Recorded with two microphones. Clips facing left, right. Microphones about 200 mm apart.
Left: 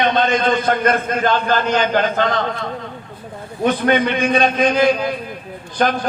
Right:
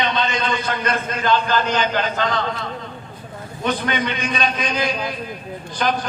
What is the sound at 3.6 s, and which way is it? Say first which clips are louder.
A man's voice: left 7 dB; 50° left (ahead or behind).